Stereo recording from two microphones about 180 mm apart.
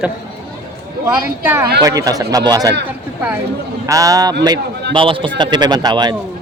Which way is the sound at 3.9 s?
20° right (ahead or behind).